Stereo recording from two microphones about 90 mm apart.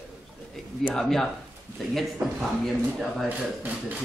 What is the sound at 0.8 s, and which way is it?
A man's voice, 5° left (ahead or behind).